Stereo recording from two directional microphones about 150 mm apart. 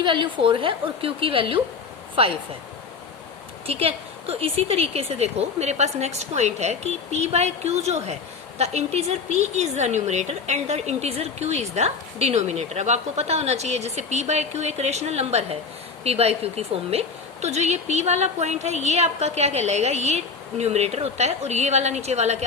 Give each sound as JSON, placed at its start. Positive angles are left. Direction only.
{"t": 0.0, "sound": "a woman's voice", "side_deg": -30}
{"t": 3.7, "sound": "a woman's voice", "side_deg": -40}